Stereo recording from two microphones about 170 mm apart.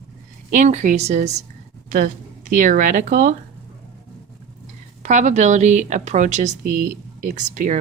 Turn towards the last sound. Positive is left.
turn(degrees=-50)  # may be behind; listen again after turning